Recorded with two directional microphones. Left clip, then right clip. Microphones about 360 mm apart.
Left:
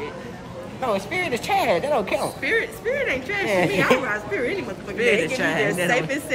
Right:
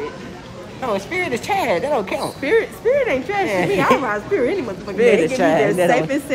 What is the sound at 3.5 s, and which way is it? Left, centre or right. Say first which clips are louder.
Speech: left 2 dB; centre.